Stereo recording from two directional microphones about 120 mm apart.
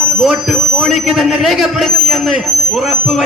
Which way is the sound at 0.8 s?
Centre (ahead or behind).